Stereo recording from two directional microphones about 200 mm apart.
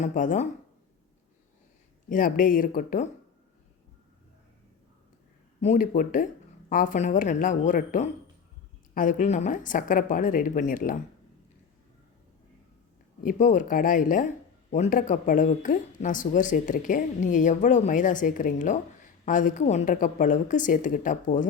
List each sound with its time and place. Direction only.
0.0 s speech: 40° left (ahead or behind)
2.0 s speech: 45° left (ahead or behind)
5.5 s speech: 40° left (ahead or behind)
13.2 s speech: 40° left (ahead or behind)